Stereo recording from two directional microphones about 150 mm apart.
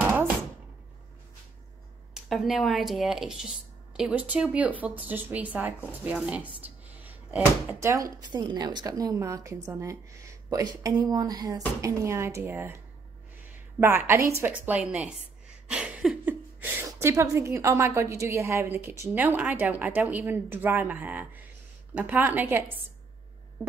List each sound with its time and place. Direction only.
2.1 s a woman's voice: centre (ahead or behind)
13.7 s a woman's voice: 15° right (ahead or behind)
15.7 s a sound: 5° right (ahead or behind)
17.0 s a woman's voice: 20° right (ahead or behind)